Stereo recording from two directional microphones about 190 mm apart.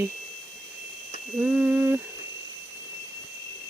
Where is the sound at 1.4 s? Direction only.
10° right (ahead or behind).